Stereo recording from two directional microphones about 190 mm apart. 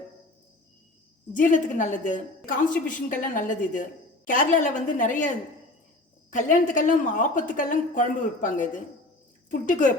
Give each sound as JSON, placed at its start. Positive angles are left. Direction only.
{"t": 1.3, "sound": "a woman's voice", "side_deg": 45}
{"t": 6.3, "sound": "a woman's voice", "side_deg": 45}